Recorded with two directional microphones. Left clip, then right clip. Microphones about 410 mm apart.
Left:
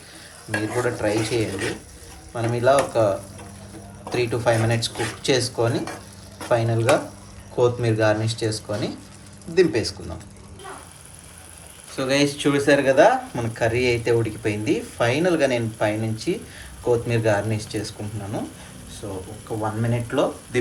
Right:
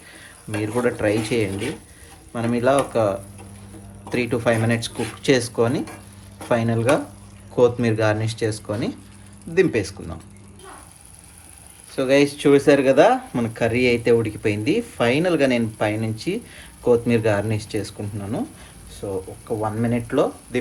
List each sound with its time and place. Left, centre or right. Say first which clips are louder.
0.6 s speech: right 3 dB; centre
4.1 s speech: even; centre
11.9 s speech: right 3 dB; centre